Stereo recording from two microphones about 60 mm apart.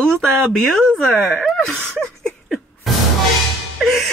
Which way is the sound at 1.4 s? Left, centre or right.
Centre.